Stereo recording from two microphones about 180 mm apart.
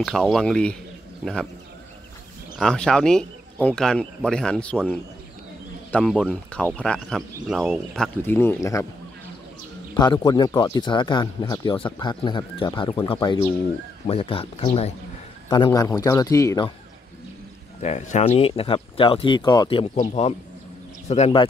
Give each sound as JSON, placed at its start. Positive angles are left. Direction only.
{"t": 0.0, "sound": "speech", "side_deg": 0}
{"t": 2.6, "sound": "speech", "side_deg": 5}
{"t": 9.9, "sound": "speech", "side_deg": 25}
{"t": 15.5, "sound": "speech", "side_deg": 20}
{"t": 17.8, "sound": "speech", "side_deg": 40}
{"t": 20.0, "sound": "speech", "side_deg": 35}